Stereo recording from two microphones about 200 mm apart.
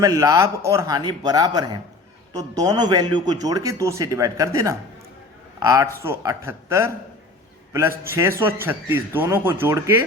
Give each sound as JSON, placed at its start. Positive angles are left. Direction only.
{"t": 0.0, "sound": "a man's voice", "side_deg": -15}